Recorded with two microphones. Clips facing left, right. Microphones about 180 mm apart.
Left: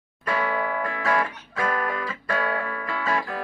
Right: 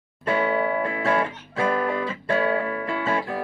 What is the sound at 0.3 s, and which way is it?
Music, 30° right (ahead or behind).